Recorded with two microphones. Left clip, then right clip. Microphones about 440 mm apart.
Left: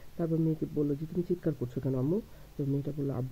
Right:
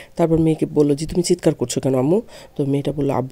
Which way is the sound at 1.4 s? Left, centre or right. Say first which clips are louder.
Right 16 dB; right.